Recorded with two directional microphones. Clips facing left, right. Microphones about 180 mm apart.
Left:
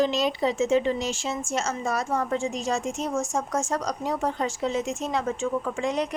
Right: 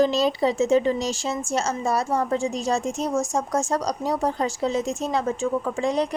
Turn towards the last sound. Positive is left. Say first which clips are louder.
# right 3 dB
turn(degrees=-35)  # may be behind; listen again after turning